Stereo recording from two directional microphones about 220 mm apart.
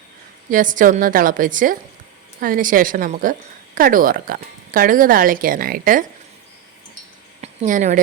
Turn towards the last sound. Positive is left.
turn(degrees=-35)  # may be behind; listen again after turning